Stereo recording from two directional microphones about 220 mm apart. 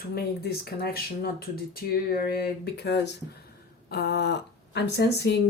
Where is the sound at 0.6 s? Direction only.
45° left (ahead or behind).